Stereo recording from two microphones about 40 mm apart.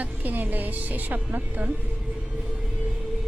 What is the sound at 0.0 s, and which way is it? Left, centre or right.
A woman's voice, right.